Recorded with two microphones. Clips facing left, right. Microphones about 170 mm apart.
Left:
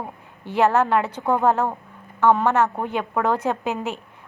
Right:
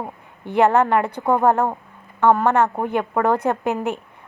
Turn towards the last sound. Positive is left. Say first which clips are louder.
# right 3 dB
turn(degrees=-60)  # may be behind; listen again after turning